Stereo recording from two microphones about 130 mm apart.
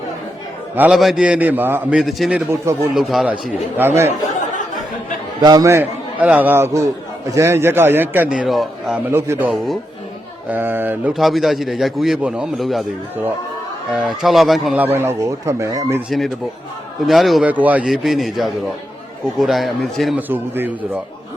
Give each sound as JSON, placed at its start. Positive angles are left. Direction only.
{"t": 0.8, "sound": "a man's voice", "side_deg": -5}
{"t": 2.0, "sound": "a man's voice", "side_deg": 0}
{"t": 2.3, "sound": "speech", "side_deg": -20}
{"t": 2.9, "sound": "a man's voice", "side_deg": 0}
{"t": 3.8, "sound": "a man's voice", "side_deg": -20}
{"t": 5.4, "sound": "a man's voice", "side_deg": -30}
{"t": 9.0, "sound": "speech", "side_deg": -20}
{"t": 10.5, "sound": "a man's voice", "side_deg": -15}
{"t": 11.1, "sound": "a man's voice", "side_deg": 0}
{"t": 13.9, "sound": "a man's voice", "side_deg": -5}
{"t": 14.8, "sound": "speech", "side_deg": -15}
{"t": 16.0, "sound": "a man's voice", "side_deg": 0}
{"t": 17.4, "sound": "a man's voice", "side_deg": -10}
{"t": 20.1, "sound": "a man's voice", "side_deg": -15}